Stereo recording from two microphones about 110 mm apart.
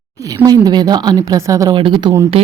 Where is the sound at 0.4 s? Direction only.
40° right (ahead or behind).